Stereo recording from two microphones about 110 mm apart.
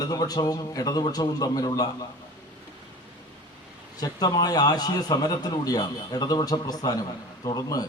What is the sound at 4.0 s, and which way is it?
A man's voice, 35° left (ahead or behind).